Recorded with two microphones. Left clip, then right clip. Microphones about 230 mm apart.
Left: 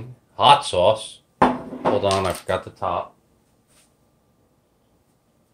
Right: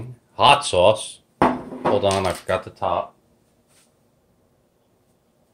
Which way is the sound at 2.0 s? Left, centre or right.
Centre.